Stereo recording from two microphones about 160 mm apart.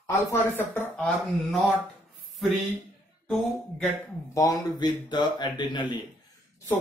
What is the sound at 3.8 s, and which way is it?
Speech, 20° left (ahead or behind).